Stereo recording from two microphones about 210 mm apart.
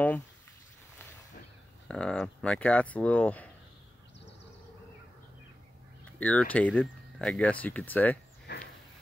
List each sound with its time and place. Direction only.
1.9 s speech: 5° left (ahead or behind)
6.1 s speech: 5° left (ahead or behind)
8.5 s a sound: 50° left (ahead or behind)